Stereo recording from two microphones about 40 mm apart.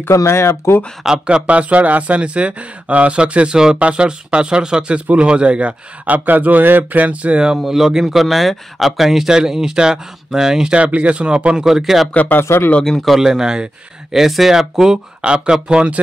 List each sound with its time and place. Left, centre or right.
0.0 s speech: left
1.0 s speech: right
6.1 s speech: right
7.6 s speech: centre
9.3 s speech: centre
10.7 s speech: right
11.6 s speech: centre
12.3 s speech: left
13.0 s speech: centre
14.1 s speech: centre
15.2 s speech: right